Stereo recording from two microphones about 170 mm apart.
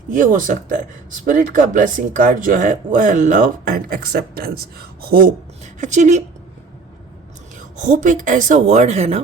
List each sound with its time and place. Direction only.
0.1 s speech: 50° right (ahead or behind)
5.8 s speech: 45° right (ahead or behind)
7.8 s speech: 45° right (ahead or behind)